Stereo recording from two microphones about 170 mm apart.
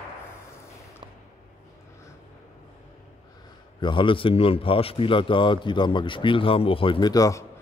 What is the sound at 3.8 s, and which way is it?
Speech, 30° left (ahead or behind).